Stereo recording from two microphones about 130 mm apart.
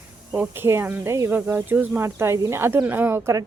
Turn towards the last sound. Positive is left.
turn(degrees=-20)  # may be behind; listen again after turning